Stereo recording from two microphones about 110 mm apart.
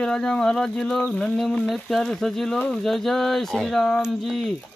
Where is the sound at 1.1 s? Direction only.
5° left (ahead or behind).